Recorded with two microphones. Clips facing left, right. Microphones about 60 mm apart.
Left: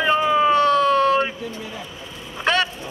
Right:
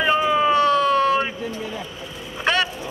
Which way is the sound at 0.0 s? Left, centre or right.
Centre.